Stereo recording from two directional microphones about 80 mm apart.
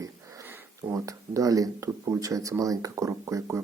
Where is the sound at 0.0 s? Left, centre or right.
Right.